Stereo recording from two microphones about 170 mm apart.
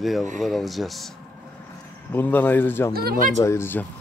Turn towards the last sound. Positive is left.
turn(degrees=15)  # may be behind; listen again after turning